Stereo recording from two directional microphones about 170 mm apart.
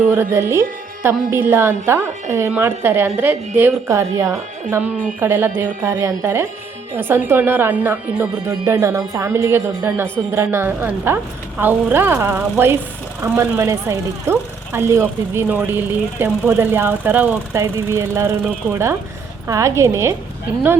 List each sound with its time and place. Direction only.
0.1 s speech: 15° right (ahead or behind)